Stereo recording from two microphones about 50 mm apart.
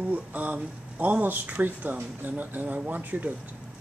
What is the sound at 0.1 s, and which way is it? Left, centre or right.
Speech, right.